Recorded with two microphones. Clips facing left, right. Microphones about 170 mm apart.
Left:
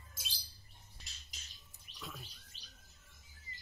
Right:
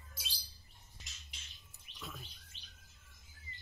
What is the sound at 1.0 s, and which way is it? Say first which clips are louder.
Bird: right 2 dB; 35° left (ahead or behind).